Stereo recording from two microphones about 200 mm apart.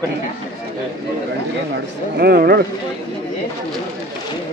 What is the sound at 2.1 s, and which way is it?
Speech, 50° right (ahead or behind).